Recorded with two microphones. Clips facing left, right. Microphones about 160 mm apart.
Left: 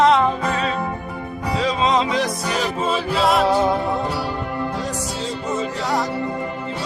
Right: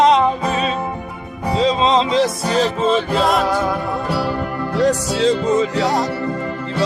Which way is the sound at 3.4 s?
25° left (ahead or behind).